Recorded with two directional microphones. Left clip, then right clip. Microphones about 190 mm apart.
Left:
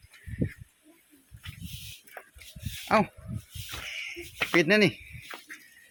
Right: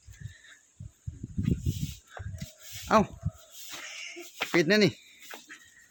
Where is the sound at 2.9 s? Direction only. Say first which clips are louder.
Even; 25° right (ahead or behind).